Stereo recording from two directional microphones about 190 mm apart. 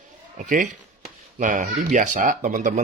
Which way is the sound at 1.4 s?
40° right (ahead or behind).